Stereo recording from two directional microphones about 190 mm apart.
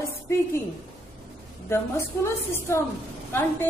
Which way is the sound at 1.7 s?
15° left (ahead or behind).